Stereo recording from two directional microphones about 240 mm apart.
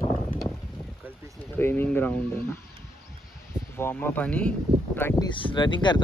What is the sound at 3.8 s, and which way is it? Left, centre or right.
Speech, centre.